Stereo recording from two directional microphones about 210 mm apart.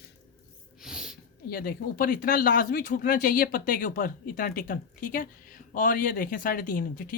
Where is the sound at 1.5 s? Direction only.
45° left (ahead or behind).